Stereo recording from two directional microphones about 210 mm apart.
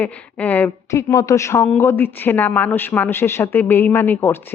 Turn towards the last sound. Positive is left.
turn(degrees=10)  # may be behind; listen again after turning